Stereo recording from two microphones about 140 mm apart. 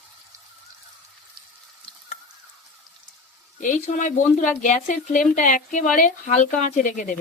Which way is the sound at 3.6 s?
60° left (ahead or behind).